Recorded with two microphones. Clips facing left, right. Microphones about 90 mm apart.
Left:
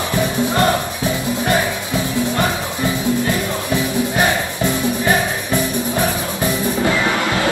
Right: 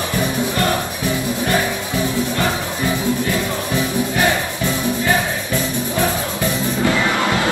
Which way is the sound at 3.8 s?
20° left (ahead or behind).